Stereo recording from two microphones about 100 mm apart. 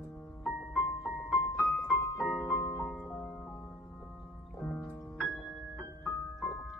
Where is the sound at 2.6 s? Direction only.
15° left (ahead or behind).